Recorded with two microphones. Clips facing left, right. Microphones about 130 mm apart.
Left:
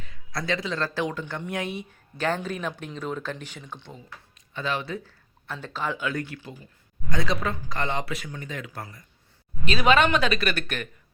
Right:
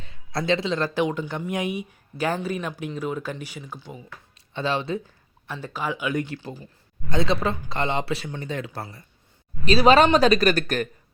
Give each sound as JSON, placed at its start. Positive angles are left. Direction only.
{"t": 0.0, "sound": "a man's voice", "side_deg": -25}
{"t": 4.5, "sound": "speech", "side_deg": -25}
{"t": 5.5, "sound": "speech", "side_deg": -10}
{"t": 6.3, "sound": "speech", "side_deg": -35}